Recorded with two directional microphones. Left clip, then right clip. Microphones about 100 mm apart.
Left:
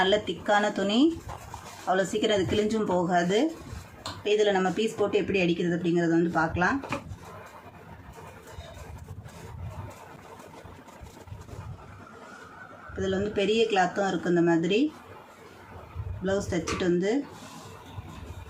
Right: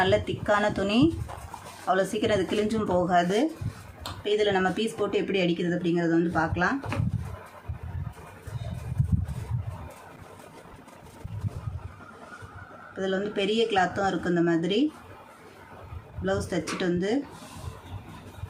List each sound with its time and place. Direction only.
0.0 s speech: 20° right (ahead or behind)
13.0 s speech: 30° right (ahead or behind)
16.2 s speech: 30° right (ahead or behind)